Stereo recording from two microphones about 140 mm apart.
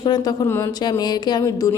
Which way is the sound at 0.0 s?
30° left (ahead or behind).